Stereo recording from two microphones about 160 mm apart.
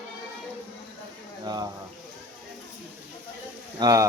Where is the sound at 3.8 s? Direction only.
20° right (ahead or behind).